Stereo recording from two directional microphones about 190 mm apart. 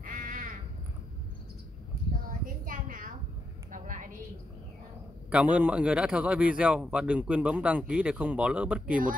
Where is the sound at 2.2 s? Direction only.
45° right (ahead or behind).